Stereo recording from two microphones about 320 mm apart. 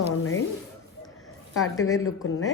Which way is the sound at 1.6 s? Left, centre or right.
Left.